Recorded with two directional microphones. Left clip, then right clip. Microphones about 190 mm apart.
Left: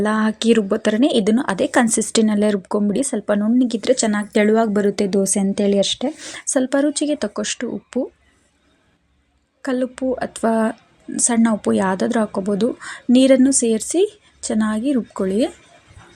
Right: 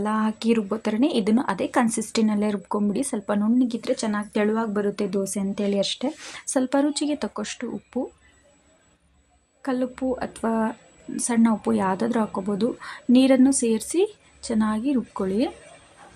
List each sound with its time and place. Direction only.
0.0 s speech: 20° left (ahead or behind)
9.6 s speech: 20° left (ahead or behind)